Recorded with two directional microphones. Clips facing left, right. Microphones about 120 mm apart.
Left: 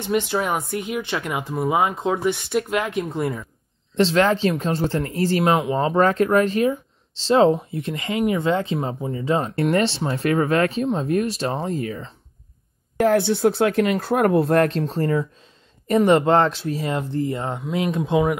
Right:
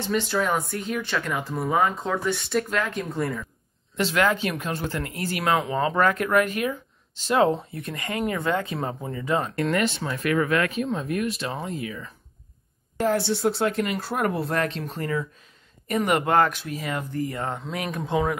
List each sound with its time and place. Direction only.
0.3 s speech: 15° left (ahead or behind)
3.9 s speech: 35° left (ahead or behind)
5.4 s speech: 20° left (ahead or behind); by 12.0 s 40° left (ahead or behind)
13.0 s speech: 55° left (ahead or behind); by 18.4 s 15° left (ahead or behind)